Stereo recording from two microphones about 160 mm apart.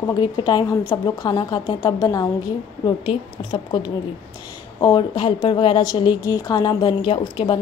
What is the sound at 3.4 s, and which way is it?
A woman's voice, 30° left (ahead or behind).